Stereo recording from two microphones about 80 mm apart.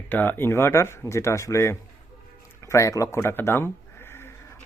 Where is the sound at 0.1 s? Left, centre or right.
Left.